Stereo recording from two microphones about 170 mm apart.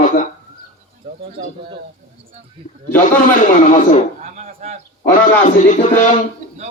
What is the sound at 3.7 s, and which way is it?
Speech, 50° left (ahead or behind).